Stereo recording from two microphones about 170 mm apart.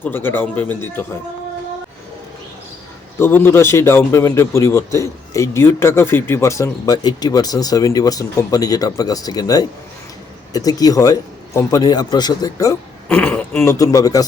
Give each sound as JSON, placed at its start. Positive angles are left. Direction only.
{"t": 0.0, "sound": "speech", "side_deg": 10}
{"t": 3.2, "sound": "a man's voice", "side_deg": 10}